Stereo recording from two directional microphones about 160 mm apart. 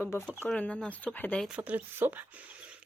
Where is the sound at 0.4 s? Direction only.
5° left (ahead or behind).